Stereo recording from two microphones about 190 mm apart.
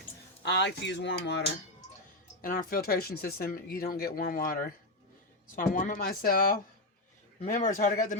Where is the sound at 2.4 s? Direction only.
50° left (ahead or behind).